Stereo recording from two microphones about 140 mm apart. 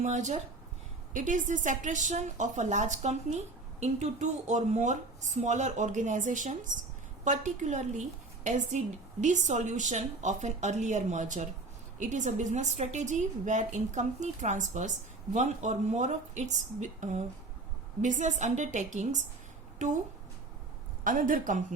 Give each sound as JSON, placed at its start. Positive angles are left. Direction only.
{"t": 0.0, "sound": "a woman's voice", "side_deg": -55}
{"t": 21.0, "sound": "speech", "side_deg": -75}